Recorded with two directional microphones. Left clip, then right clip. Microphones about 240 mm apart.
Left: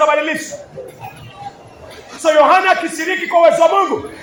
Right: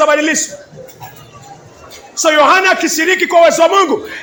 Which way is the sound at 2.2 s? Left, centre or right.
Right.